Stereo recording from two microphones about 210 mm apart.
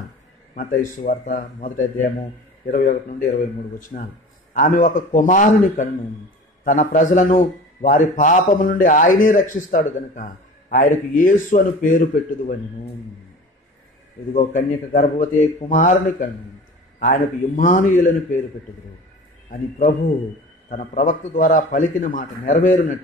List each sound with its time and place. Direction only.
0.9 s a man's voice: 40° left (ahead or behind)
14.3 s a man's voice: 40° left (ahead or behind)
19.5 s a man's voice: 40° left (ahead or behind)